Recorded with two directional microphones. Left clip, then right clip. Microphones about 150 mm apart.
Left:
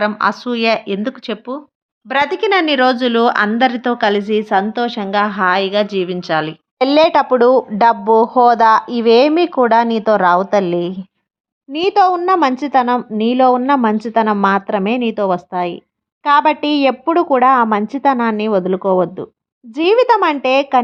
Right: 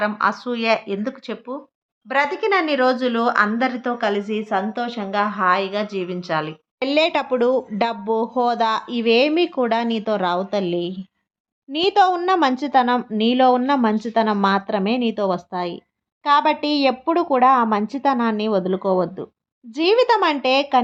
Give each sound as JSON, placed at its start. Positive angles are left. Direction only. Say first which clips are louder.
{"t": 0.0, "sound": "speech", "louder": "left 4 dB", "side_deg": 30}
{"t": 11.7, "sound": "a woman's voice", "louder": "left 4 dB", "side_deg": 25}